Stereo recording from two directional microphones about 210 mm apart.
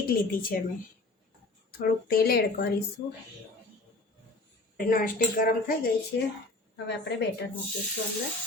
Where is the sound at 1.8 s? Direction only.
45° left (ahead or behind).